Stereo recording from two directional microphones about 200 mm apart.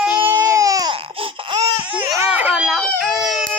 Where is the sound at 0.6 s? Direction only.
15° right (ahead or behind).